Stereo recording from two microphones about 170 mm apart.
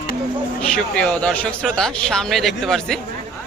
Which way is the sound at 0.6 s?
5° left (ahead or behind).